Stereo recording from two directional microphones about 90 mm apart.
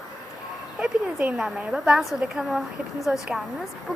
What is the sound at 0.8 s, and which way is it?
A woman's voice, 15° right (ahead or behind).